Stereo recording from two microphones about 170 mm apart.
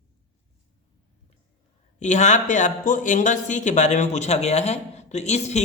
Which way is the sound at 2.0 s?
45° left (ahead or behind).